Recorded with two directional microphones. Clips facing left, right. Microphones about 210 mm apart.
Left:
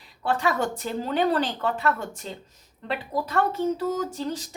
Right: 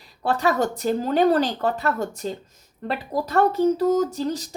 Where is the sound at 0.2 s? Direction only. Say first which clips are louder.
Right 3 dB; 40° right (ahead or behind).